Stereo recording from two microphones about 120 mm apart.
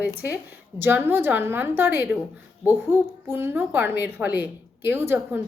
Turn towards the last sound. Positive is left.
turn(degrees=-20)  # may be behind; listen again after turning